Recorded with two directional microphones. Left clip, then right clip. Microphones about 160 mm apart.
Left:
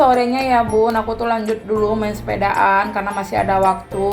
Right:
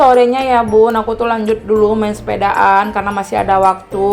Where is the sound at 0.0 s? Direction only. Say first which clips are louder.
Right 5 dB; 25° right (ahead or behind).